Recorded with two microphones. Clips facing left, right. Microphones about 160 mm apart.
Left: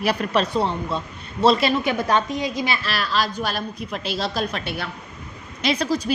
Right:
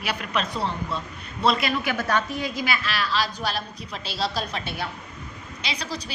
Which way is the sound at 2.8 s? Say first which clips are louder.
Left 2 dB; 40° left (ahead or behind).